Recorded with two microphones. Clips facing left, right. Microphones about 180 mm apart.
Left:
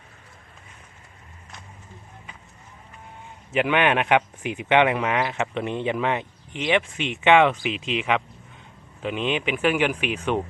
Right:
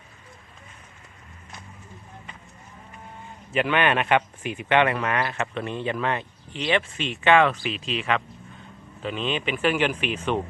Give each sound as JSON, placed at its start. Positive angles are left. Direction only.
{"t": 3.5, "sound": "speech", "side_deg": 15}